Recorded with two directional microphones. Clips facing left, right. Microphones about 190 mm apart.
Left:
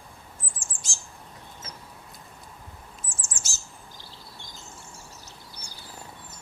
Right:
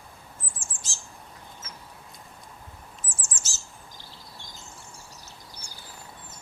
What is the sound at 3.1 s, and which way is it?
Bird, 10° left (ahead or behind).